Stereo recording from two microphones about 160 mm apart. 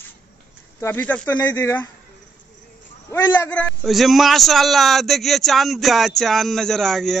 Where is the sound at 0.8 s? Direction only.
10° left (ahead or behind).